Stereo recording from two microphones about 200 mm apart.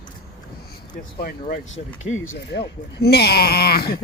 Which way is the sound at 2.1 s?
80° left.